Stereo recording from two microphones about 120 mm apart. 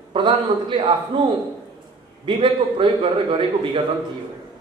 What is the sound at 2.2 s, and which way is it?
A man's voice, 40° right (ahead or behind).